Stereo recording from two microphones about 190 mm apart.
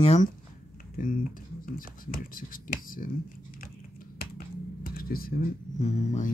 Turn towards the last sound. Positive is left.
turn(degrees=35)  # may be behind; listen again after turning